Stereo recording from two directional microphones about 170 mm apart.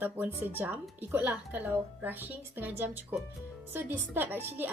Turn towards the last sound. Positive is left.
turn(degrees=-10)  # may be behind; listen again after turning